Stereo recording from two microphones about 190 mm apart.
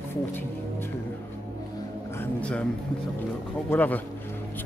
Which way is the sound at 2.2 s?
5° left (ahead or behind).